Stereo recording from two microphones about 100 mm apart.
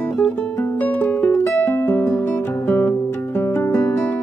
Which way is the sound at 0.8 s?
15° left (ahead or behind).